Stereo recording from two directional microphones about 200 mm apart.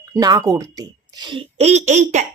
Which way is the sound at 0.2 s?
20° right (ahead or behind).